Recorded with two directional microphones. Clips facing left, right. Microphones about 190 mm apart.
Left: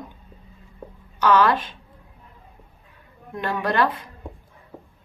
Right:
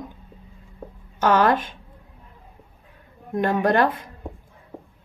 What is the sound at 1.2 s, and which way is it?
Speech, 45° right (ahead or behind).